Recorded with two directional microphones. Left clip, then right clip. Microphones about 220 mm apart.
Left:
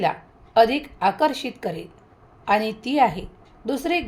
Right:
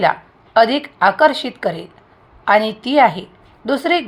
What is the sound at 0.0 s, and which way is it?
A woman's voice, 10° right (ahead or behind).